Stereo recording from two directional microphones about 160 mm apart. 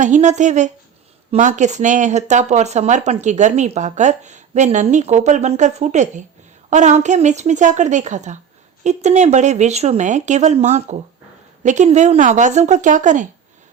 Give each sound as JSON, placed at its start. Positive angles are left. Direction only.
{"t": 0.0, "sound": "speech", "side_deg": -50}